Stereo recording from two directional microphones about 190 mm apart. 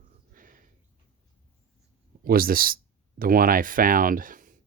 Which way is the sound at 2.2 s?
50° right (ahead or behind).